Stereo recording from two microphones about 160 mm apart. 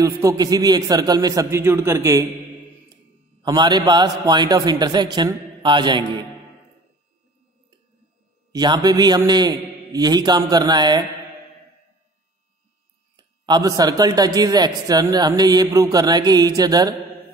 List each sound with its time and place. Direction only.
0.0 s a man's voice: 20° right (ahead or behind)
3.4 s a man's voice: 25° right (ahead or behind)
8.5 s a man's voice: 25° right (ahead or behind)
13.1 s a man's voice: 25° right (ahead or behind)